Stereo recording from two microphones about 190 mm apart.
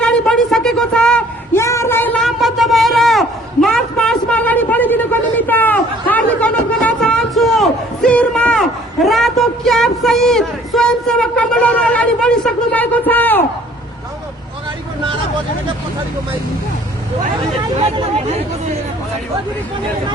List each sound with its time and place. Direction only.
0.0 s a woman's voice: 5° left (ahead or behind)
1.6 s a sound: 15° left (ahead or behind)
5.4 s a man's voice: 10° left (ahead or behind)
17.7 s speech: 30° right (ahead or behind)